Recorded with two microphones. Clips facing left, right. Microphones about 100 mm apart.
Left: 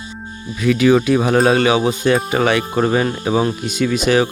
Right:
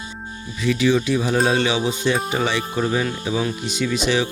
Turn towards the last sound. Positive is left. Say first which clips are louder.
# left 5 dB
turn(degrees=50)  # may be behind; listen again after turning